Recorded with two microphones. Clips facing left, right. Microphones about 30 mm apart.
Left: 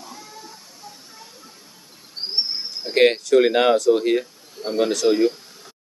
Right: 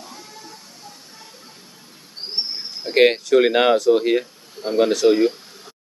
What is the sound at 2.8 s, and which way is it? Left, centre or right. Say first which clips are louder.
Speech: right 1 dB; centre.